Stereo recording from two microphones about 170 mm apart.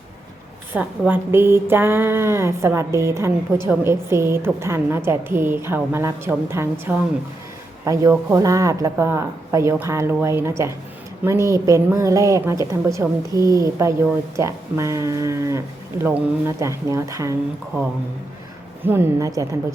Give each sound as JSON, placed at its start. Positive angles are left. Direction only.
{"t": 0.7, "sound": "speech", "side_deg": -10}